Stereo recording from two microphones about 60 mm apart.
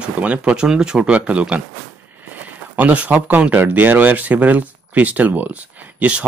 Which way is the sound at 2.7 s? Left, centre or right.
Right.